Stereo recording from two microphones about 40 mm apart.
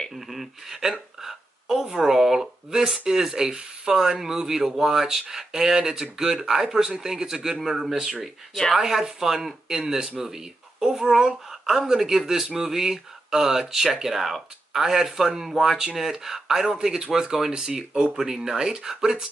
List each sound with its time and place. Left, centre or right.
0.3 s speech: centre
1.2 s a sound: centre
3.1 s speech: centre